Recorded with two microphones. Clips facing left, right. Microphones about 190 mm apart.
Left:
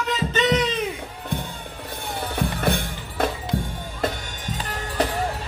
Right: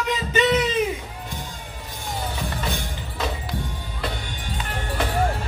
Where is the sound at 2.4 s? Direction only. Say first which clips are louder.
Left 5 dB; 55° left (ahead or behind).